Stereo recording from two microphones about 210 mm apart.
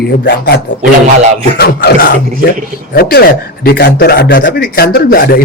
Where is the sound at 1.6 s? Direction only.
45° left (ahead or behind).